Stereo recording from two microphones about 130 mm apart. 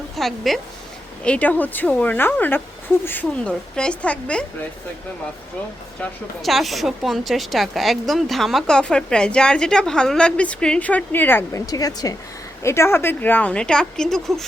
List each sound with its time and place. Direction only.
0.2 s speech: centre (ahead or behind)
6.0 s speech: centre (ahead or behind); by 11.6 s 15° left (ahead or behind)
11.6 s a woman's voice: 25° left (ahead or behind); by 14.4 s 5° left (ahead or behind)